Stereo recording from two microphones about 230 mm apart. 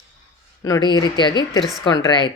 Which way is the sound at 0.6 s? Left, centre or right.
Centre.